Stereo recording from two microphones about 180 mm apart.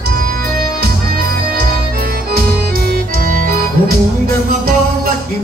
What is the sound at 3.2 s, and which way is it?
Music, 50° right (ahead or behind).